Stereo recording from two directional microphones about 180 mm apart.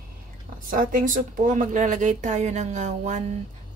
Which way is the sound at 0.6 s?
50° right (ahead or behind).